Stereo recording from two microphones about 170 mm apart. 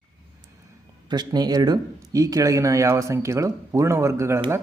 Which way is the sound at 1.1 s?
25° right (ahead or behind).